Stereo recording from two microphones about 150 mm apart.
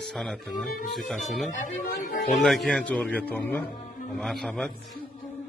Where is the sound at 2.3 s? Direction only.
Centre (ahead or behind).